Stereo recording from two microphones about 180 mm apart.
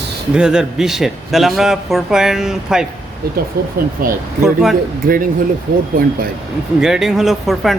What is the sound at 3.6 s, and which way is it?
Speech, 60° right (ahead or behind).